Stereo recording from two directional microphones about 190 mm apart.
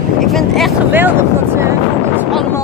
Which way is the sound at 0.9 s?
10° right (ahead or behind).